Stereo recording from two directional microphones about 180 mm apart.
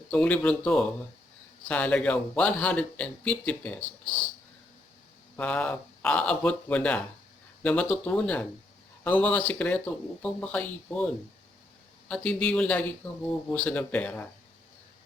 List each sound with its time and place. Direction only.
0.1 s speech: 5° left (ahead or behind)
5.4 s speech: 10° left (ahead or behind)